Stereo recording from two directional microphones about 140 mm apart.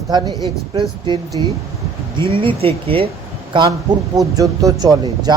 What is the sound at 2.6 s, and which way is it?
A man's voice, 40° right (ahead or behind).